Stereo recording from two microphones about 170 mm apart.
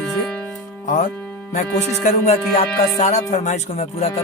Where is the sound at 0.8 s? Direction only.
50° left (ahead or behind).